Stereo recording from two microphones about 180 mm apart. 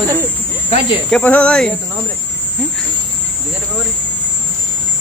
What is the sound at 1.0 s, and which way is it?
Speech, 5° left (ahead or behind).